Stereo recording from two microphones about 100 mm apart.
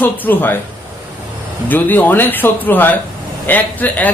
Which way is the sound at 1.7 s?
20° left (ahead or behind).